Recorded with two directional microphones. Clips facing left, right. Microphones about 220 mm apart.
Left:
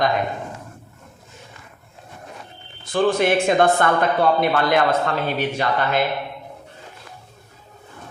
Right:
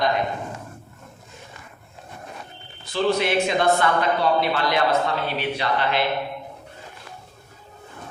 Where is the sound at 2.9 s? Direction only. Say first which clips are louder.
Left 3 dB; 50° left (ahead or behind).